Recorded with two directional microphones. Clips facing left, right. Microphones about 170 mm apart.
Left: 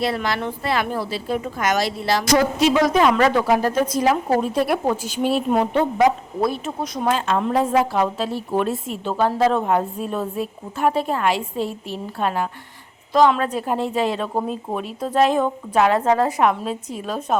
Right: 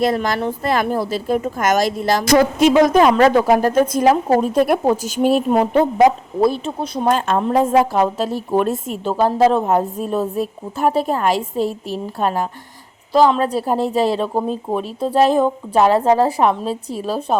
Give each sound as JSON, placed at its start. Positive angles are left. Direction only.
{"t": 0.0, "sound": "speech", "side_deg": -45}
{"t": 6.4, "sound": "speech", "side_deg": -30}
{"t": 7.1, "sound": "a woman's voice", "side_deg": -45}